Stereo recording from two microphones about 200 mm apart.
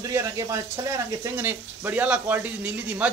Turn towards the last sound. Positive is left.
turn(degrees=-10)  # may be behind; listen again after turning